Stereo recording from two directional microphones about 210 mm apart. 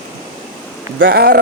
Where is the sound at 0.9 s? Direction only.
55° right (ahead or behind).